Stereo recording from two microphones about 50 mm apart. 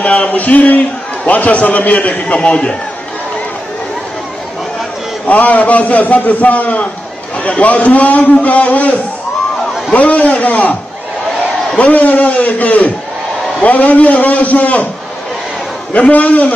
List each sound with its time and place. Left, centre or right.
0.0 s a man's voice: left
2.3 s a man's voice: centre
5.2 s a man's voice: left
15.9 s a man's voice: left